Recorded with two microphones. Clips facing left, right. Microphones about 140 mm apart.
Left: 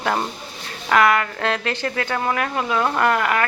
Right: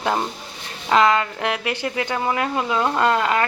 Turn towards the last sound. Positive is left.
turn(degrees=-25)  # may be behind; listen again after turning